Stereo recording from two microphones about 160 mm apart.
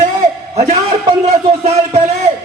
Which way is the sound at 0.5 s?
45° right (ahead or behind).